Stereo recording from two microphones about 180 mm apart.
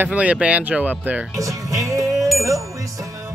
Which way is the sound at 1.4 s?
15° right (ahead or behind).